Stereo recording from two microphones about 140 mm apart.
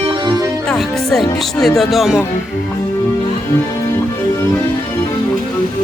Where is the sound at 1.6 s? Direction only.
Centre (ahead or behind).